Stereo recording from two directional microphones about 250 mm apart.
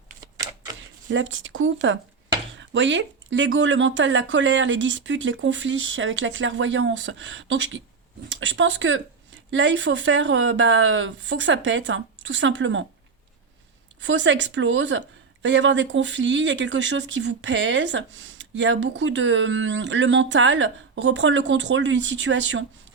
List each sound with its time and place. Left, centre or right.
1.1 s speech: right
14.0 s speech: right